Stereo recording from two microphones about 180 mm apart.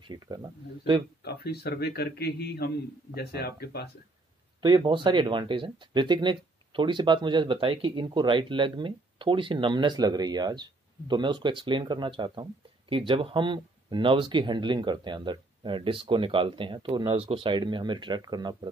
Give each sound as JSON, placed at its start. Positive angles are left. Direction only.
{"t": 0.0, "sound": "speech", "side_deg": -25}
{"t": 1.2, "sound": "speech", "side_deg": 60}
{"t": 4.6, "sound": "speech", "side_deg": -25}